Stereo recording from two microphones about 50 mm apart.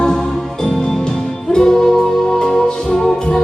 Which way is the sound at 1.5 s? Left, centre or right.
Centre.